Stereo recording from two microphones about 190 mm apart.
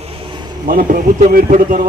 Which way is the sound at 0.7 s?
45° right (ahead or behind).